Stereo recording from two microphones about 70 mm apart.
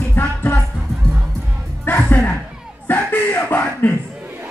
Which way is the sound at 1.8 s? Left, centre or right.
Left.